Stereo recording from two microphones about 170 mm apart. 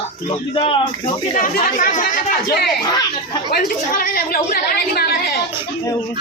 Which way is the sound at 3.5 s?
60° left (ahead or behind).